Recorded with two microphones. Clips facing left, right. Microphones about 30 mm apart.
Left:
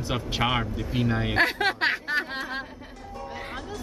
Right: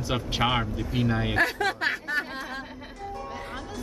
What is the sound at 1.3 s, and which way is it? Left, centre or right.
Speech, left.